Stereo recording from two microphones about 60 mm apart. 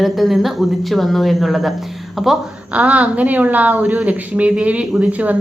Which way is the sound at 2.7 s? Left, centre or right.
Right.